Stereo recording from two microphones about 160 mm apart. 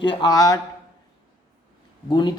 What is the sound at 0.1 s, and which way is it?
Speech, 25° left (ahead or behind).